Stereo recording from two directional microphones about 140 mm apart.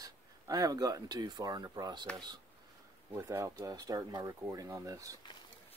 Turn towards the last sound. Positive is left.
turn(degrees=-25)  # may be behind; listen again after turning